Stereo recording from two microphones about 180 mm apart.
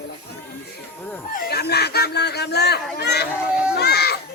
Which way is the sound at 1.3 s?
60° left (ahead or behind).